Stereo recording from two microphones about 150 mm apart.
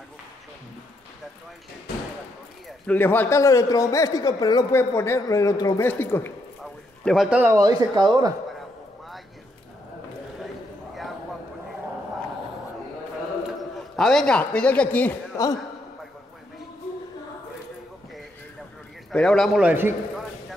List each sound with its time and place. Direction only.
2.9 s a man's voice: 15° left (ahead or behind)
6.6 s a sound: centre (ahead or behind)
7.5 s speech: 25° right (ahead or behind)
13.7 s speech: 5° left (ahead or behind)
15.4 s a man's voice: 20° left (ahead or behind)
19.1 s speech: 5° left (ahead or behind)
19.6 s a man's voice: 10° right (ahead or behind)